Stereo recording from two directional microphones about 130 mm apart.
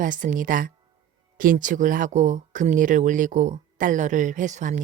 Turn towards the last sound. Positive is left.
turn(degrees=-65)  # may be behind; listen again after turning